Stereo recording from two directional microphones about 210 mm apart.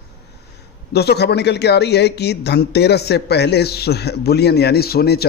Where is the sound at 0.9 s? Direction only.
50° left (ahead or behind).